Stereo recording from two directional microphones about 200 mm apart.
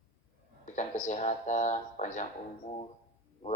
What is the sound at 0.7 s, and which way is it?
A man's voice, 40° left (ahead or behind).